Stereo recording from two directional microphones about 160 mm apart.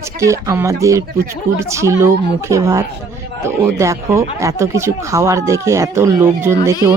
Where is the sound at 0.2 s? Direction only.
20° right (ahead or behind).